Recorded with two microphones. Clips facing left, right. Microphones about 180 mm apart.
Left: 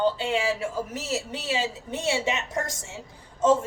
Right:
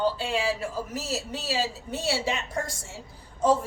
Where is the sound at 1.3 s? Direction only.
20° left (ahead or behind).